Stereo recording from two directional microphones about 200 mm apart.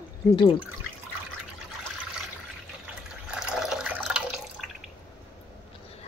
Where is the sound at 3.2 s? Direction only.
5° right (ahead or behind).